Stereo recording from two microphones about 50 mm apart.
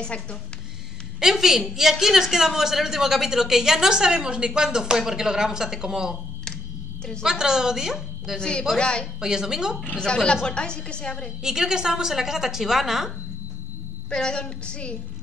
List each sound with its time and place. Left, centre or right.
0.0 s a woman's voice: left
1.2 s a man's voice: centre
7.2 s a man's voice: centre
8.4 s a woman's voice: centre
9.2 s a man's voice: centre
9.9 s a woman's voice: centre
11.4 s a man's voice: centre
14.1 s a woman's voice: centre